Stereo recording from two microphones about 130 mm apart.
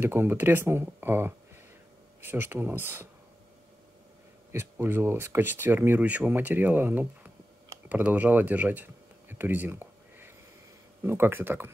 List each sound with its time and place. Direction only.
0.0 s speech: 20° right (ahead or behind)
4.5 s speech: 20° right (ahead or behind)
7.9 s a sound: 10° right (ahead or behind)
11.1 s speech: 15° right (ahead or behind)